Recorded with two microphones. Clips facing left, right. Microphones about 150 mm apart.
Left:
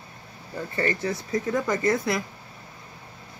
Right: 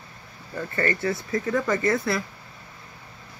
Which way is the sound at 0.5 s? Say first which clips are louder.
Right 1 dB; 10° left (ahead or behind).